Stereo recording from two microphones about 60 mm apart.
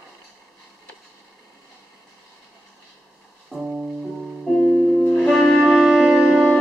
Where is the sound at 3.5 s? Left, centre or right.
Centre.